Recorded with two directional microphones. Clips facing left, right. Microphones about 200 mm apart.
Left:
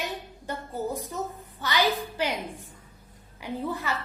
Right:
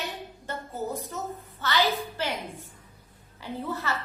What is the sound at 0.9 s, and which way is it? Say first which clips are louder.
A woman's voice: left 1 dB; 15° left (ahead or behind).